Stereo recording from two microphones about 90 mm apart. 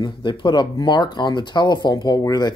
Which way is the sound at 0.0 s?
60° left (ahead or behind).